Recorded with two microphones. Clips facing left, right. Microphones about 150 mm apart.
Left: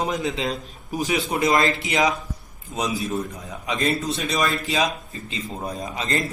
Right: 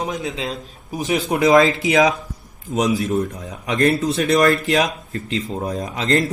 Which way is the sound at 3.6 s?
90° right.